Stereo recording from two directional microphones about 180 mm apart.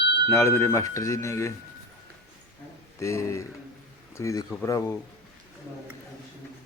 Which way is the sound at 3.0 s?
15° left (ahead or behind).